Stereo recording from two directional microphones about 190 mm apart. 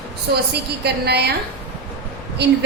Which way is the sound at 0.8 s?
60° right (ahead or behind).